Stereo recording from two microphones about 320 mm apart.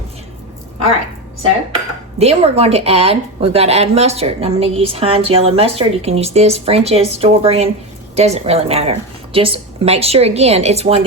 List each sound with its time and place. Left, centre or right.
2.1 s speech: centre